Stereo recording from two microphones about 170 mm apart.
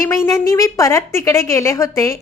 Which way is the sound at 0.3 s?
20° left (ahead or behind).